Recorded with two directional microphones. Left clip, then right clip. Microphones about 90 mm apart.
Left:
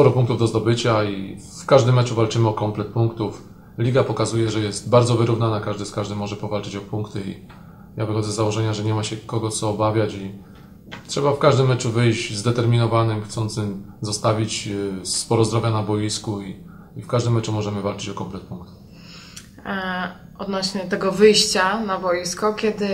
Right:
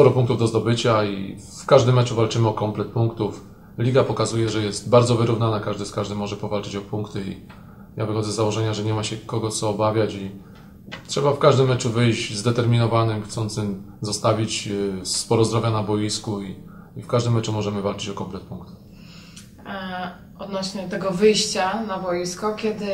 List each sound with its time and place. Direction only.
0.0 s speech: centre (ahead or behind)
19.6 s a woman's voice: 30° left (ahead or behind)